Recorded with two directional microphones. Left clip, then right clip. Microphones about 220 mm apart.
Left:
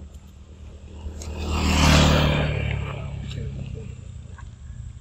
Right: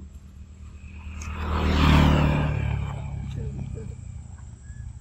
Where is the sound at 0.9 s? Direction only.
25° left (ahead or behind); by 2.0 s 45° left (ahead or behind).